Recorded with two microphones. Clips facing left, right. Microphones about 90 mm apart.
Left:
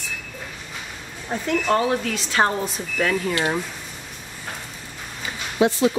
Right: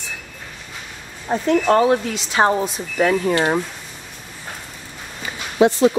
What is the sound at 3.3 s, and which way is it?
Speech, 35° right (ahead or behind).